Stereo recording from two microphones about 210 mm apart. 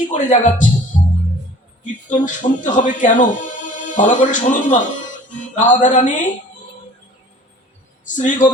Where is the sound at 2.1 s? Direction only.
35° left (ahead or behind).